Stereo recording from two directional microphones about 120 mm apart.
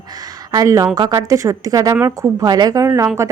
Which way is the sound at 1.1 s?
25° right (ahead or behind).